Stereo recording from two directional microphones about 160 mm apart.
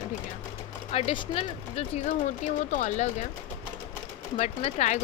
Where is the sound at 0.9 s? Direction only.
35° left (ahead or behind).